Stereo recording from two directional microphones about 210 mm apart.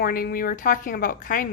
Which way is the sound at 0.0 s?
45° left (ahead or behind).